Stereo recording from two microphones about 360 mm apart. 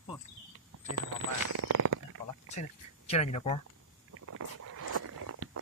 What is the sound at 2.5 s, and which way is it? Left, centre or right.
Speech, centre.